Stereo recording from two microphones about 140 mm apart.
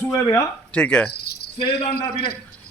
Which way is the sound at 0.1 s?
25° left (ahead or behind).